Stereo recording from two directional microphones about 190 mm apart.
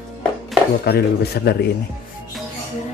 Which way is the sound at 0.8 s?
55° left (ahead or behind).